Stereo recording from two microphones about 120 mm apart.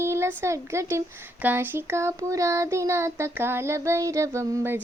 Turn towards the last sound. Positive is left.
turn(degrees=-20)  # may be behind; listen again after turning